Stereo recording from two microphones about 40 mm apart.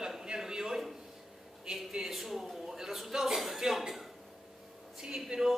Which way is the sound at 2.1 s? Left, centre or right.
Centre.